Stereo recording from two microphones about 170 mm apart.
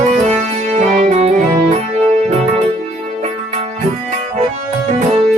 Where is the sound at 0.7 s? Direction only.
45° right (ahead or behind).